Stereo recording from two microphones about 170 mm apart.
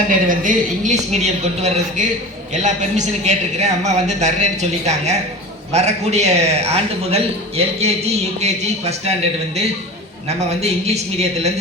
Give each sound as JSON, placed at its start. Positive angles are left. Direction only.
{"t": 0.1, "sound": "a woman's voice", "side_deg": -50}
{"t": 10.2, "sound": "a man's voice", "side_deg": -40}